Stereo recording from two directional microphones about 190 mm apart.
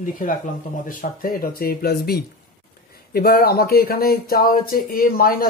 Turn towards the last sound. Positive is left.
turn(degrees=50)  # may be behind; listen again after turning